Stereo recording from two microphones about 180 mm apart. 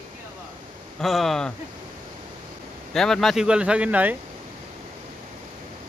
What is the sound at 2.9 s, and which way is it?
Speech, centre (ahead or behind).